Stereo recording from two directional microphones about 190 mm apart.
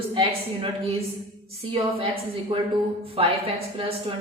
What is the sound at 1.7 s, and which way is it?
A woman's voice, 30° right (ahead or behind).